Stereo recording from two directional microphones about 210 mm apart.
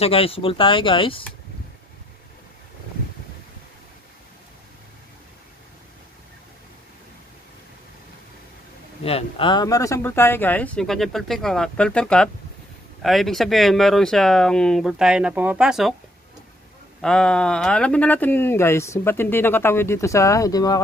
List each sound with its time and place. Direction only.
0.0 s speech: 25° left (ahead or behind)
9.0 s speech: 25° left (ahead or behind); by 15.9 s 5° right (ahead or behind)
17.0 s speech: 5° left (ahead or behind)